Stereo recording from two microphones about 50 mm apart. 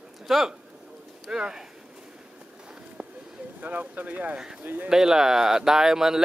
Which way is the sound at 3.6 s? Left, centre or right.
Right.